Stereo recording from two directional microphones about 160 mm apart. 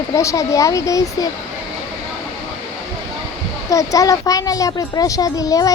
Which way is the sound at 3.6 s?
20° left (ahead or behind).